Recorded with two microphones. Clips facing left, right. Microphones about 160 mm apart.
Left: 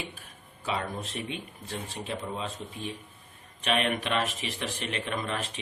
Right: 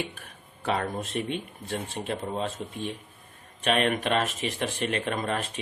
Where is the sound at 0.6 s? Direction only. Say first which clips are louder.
Right 4 dB; 50° right (ahead or behind).